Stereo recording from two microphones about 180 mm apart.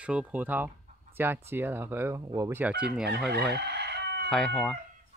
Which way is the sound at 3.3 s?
65° right (ahead or behind).